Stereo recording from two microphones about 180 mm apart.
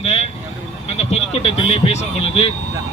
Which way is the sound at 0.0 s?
35° left (ahead or behind).